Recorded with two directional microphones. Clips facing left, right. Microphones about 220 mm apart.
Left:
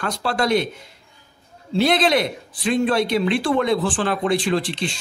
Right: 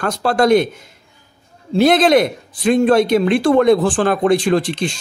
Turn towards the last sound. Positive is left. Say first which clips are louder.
# right 5 dB
turn(degrees=-45)  # may be behind; listen again after turning